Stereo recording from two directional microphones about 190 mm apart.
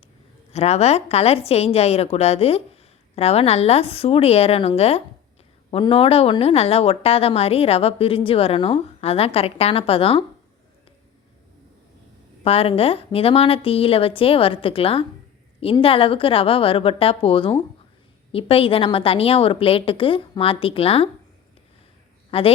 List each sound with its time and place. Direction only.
0.5 s a woman's voice: 35° left (ahead or behind)
12.5 s a woman's voice: 30° left (ahead or behind)
22.3 s a woman's voice: 30° left (ahead or behind)